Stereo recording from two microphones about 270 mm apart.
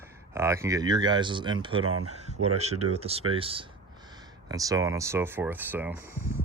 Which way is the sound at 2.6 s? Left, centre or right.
Right.